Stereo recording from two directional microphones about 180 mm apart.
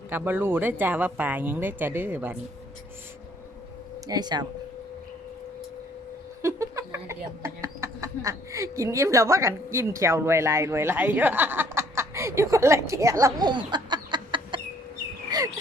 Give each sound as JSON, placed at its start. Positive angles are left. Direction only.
{"t": 0.1, "sound": "speech", "side_deg": -10}
{"t": 4.0, "sound": "speech", "side_deg": -20}
{"t": 6.4, "sound": "speech", "side_deg": -15}
{"t": 13.7, "sound": "a sound", "side_deg": -25}
{"t": 15.3, "sound": "bird", "side_deg": -20}